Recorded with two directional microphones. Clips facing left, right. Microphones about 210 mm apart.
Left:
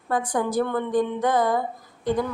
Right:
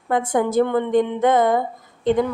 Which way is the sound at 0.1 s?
25° right (ahead or behind).